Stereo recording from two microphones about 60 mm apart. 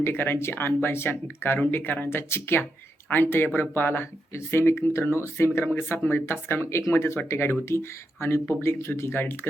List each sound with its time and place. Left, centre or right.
0.0 s speech: left